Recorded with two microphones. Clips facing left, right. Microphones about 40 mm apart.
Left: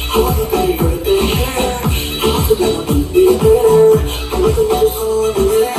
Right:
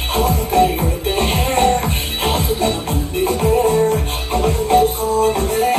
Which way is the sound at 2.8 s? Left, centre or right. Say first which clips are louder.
Left 9 dB; right.